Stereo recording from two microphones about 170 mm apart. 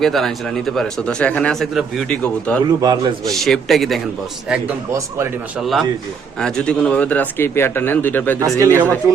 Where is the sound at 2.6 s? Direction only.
25° right (ahead or behind).